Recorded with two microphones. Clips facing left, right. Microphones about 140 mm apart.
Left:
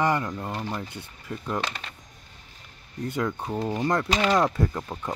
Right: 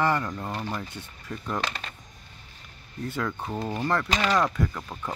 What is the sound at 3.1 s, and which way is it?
Speech, 15° left (ahead or behind).